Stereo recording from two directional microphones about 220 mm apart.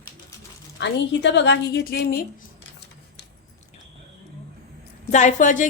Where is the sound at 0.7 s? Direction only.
50° left (ahead or behind).